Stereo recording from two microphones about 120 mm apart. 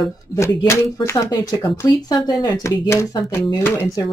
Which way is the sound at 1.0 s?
25° left (ahead or behind).